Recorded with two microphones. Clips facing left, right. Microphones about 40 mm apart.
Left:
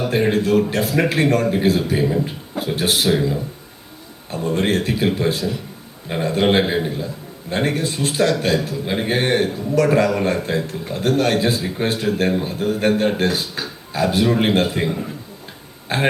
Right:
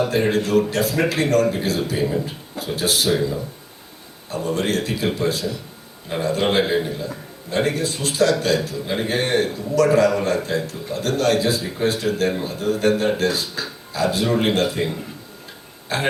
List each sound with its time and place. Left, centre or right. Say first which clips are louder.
0.5 s a man's voice: left 1 dB; left
3.1 s a man's voice: left 2 dB; left